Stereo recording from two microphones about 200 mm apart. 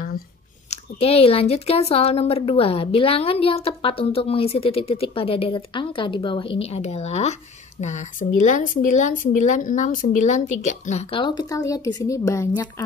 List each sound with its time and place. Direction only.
0.7 s speech: 30° left (ahead or behind)